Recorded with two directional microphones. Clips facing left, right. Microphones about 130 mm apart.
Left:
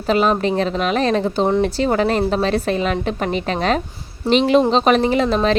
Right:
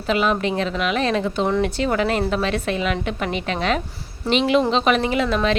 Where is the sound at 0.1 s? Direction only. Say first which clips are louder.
Left 4 dB; 40° left (ahead or behind).